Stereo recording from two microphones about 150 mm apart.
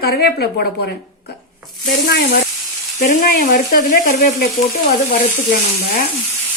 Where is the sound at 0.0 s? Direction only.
90° left.